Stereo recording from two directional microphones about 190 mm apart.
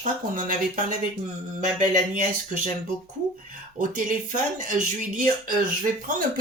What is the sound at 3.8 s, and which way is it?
Speech, 45° right (ahead or behind).